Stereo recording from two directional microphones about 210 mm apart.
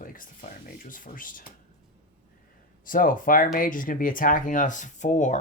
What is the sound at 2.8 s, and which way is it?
Speech, 40° left (ahead or behind).